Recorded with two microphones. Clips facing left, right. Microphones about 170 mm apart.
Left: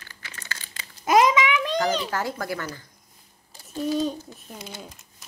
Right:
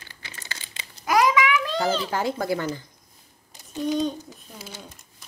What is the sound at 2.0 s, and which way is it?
Speech, 20° right (ahead or behind).